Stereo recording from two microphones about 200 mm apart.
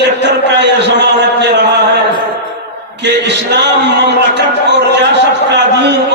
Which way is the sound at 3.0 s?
60° right (ahead or behind).